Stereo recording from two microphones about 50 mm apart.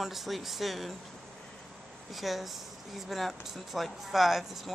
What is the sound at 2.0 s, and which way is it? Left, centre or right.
Speech, centre.